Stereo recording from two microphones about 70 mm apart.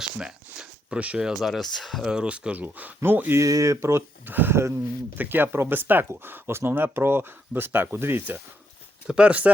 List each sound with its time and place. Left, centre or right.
0.2 s a sound: centre
1.3 s speech: centre
2.0 s speech: centre; by 3.4 s right
3.4 s speech: right
4.3 s speech: right
9.0 s speech: centre